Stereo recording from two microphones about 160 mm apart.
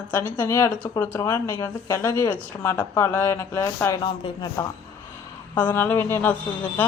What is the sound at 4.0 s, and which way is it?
Speech, 30° left (ahead or behind).